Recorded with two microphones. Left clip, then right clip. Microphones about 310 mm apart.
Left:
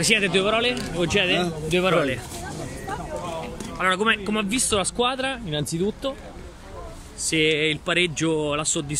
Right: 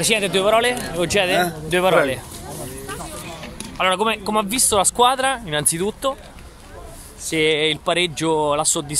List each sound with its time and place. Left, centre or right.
0.0 s speech: centre
3.7 s speech: centre; by 5.9 s right
7.2 s speech: centre